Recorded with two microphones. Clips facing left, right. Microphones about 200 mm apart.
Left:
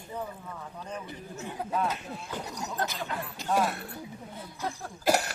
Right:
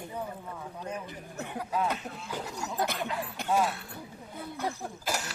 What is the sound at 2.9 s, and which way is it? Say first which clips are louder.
Speech: right 2 dB; 60° right (ahead or behind).